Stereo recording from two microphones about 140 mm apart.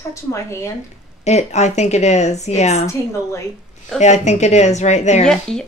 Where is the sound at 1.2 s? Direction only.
55° left (ahead or behind).